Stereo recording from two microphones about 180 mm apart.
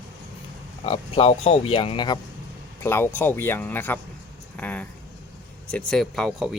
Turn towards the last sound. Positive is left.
turn(degrees=0)  # may be behind; listen again after turning